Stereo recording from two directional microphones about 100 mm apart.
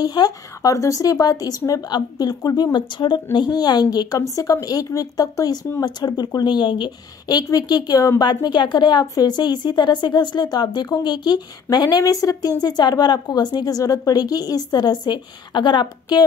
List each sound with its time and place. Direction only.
0.0 s a woman's voice: 40° left (ahead or behind)